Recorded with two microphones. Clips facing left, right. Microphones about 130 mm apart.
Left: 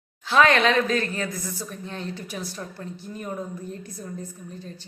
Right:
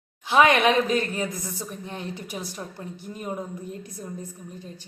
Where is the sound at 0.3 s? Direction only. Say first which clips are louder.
Right 1 dB; 15° right (ahead or behind).